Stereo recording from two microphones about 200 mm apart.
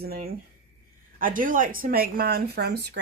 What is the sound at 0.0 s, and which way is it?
Speech, 50° right (ahead or behind).